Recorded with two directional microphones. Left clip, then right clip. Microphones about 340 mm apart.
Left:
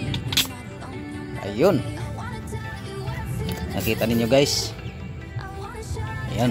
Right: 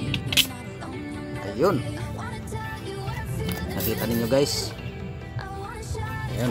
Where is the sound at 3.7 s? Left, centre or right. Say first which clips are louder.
Left 5 dB; centre.